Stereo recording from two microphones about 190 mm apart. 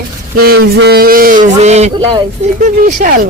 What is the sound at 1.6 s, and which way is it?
Speech, 35° right (ahead or behind).